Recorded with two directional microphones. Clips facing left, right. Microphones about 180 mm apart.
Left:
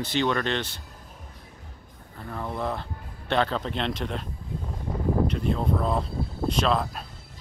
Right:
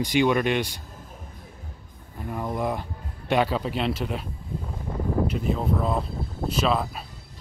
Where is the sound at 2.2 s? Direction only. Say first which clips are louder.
Right 3 dB; 15° right (ahead or behind).